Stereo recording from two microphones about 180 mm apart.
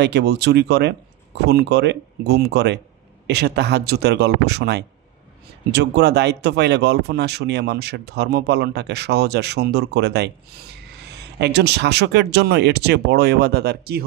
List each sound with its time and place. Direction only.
0.0 s speech: 65° right (ahead or behind)